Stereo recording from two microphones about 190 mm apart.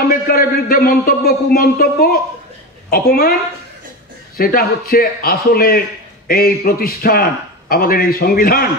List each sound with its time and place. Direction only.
0.1 s a man's voice: 50° left (ahead or behind)
4.4 s a man's voice: 50° left (ahead or behind)